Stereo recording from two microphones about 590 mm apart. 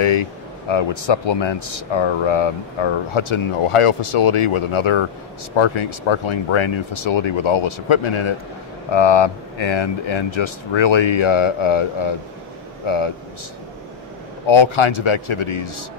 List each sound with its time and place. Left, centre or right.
0.0 s speech: left
14.4 s speech: left